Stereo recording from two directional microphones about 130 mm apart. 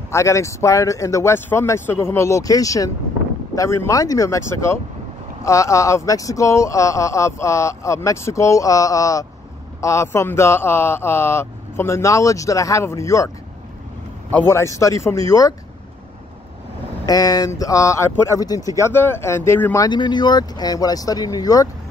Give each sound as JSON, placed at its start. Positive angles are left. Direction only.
{"t": 0.1, "sound": "speech", "side_deg": 20}
{"t": 14.3, "sound": "speech", "side_deg": 20}
{"t": 17.0, "sound": "speech", "side_deg": 30}
{"t": 19.8, "sound": "speech", "side_deg": 35}